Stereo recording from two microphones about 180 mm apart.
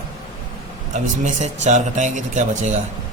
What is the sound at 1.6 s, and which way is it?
Speech, 40° right (ahead or behind).